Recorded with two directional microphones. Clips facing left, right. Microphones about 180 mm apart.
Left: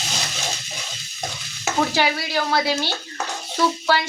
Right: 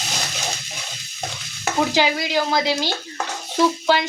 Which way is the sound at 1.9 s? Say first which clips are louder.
Right 2 dB; 15° right (ahead or behind).